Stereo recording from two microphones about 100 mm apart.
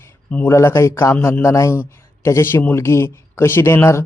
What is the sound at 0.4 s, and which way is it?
A man's voice, 25° left (ahead or behind).